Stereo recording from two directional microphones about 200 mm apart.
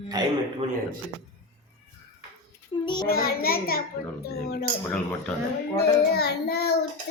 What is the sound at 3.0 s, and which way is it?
Child singing, 50° left (ahead or behind).